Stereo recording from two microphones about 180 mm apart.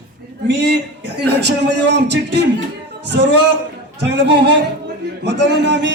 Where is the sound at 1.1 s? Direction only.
70° right (ahead or behind).